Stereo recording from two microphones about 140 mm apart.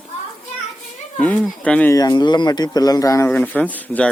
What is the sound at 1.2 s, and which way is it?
Speech, 10° left (ahead or behind).